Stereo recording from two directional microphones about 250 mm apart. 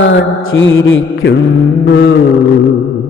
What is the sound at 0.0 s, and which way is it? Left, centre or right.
Music, left.